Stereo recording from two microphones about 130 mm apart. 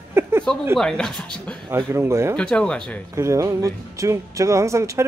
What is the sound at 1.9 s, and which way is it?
Speech, 20° right (ahead or behind).